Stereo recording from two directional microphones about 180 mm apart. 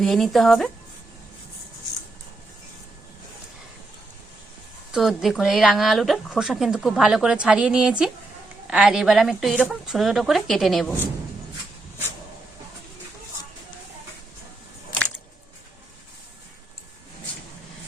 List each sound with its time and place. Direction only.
0.0 s speech: centre (ahead or behind)
4.9 s speech: centre (ahead or behind)